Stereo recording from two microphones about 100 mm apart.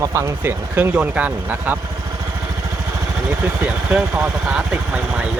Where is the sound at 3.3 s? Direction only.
15° right (ahead or behind).